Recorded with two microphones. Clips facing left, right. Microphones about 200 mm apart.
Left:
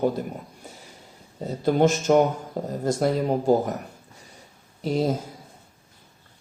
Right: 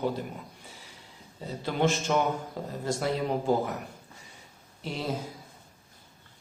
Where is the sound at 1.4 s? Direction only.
45° left (ahead or behind).